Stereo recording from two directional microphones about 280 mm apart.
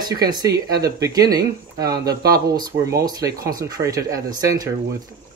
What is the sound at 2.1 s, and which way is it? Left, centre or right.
Speech, right.